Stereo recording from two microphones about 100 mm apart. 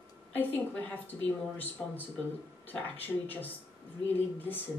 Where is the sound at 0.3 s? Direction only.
20° left (ahead or behind).